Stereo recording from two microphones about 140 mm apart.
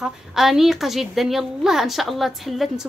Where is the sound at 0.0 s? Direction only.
Centre (ahead or behind).